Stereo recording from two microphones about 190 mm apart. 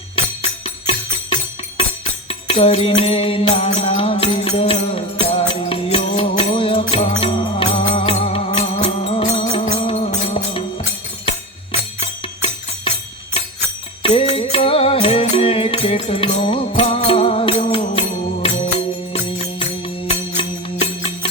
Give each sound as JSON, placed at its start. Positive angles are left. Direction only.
{"t": 0.6, "sound": "music", "side_deg": 30}
{"t": 2.5, "sound": "music", "side_deg": 30}
{"t": 13.4, "sound": "music", "side_deg": 30}